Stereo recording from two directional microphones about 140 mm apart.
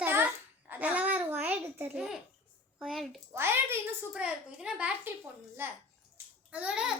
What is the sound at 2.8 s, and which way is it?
Speech, centre (ahead or behind).